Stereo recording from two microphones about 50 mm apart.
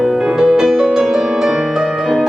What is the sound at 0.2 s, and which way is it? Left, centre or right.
Music, centre.